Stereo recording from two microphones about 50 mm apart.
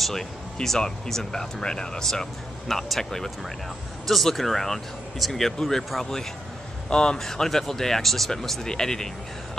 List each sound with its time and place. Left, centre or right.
0.0 s speech: centre
6.9 s speech: centre